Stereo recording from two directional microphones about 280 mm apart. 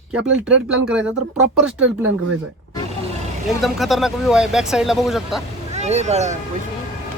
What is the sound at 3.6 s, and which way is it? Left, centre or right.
Speech, centre.